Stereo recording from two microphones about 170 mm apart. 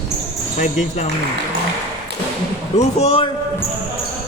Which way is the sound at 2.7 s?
40° left (ahead or behind).